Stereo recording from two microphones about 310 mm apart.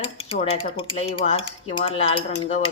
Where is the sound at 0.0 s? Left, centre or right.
Centre.